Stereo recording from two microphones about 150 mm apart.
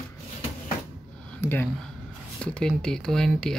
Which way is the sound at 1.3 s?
15° left (ahead or behind).